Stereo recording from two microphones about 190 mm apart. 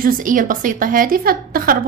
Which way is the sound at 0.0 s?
45° right (ahead or behind).